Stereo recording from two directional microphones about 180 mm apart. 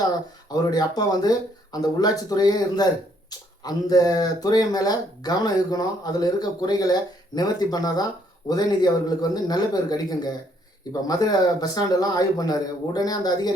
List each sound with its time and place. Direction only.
0.5 s speech: 20° left (ahead or behind)